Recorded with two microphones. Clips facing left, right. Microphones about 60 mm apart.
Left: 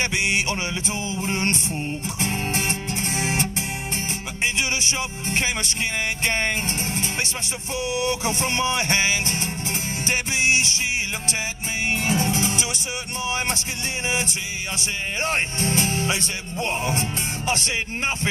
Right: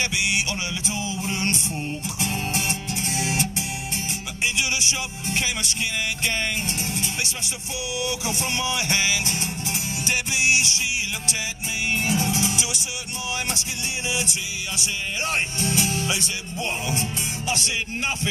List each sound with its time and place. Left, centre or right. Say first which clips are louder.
0.0 s speech: left 2 dB; left
2.1 s guitar: left 2 dB; left
4.6 s speech: left 1 dB; left
7.9 s music: left 3 dB; left
11.9 s speech: left 1 dB; left